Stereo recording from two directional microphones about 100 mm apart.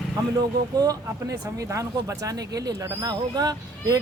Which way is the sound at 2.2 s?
40° right (ahead or behind).